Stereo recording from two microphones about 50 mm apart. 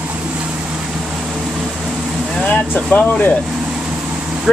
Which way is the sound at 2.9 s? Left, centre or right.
Left.